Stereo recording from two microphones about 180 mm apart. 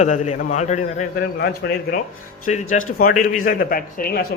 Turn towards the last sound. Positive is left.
turn(degrees=55)  # may be behind; listen again after turning